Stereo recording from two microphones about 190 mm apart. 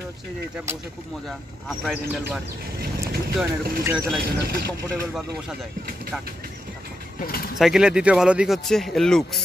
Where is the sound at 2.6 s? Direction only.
55° right (ahead or behind).